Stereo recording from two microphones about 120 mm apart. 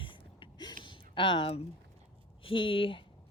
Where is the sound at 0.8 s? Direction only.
45° left (ahead or behind).